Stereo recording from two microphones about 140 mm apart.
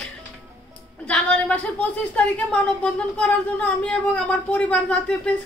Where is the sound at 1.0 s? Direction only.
5° left (ahead or behind).